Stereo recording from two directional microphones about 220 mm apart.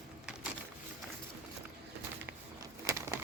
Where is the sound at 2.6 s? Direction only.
15° right (ahead or behind).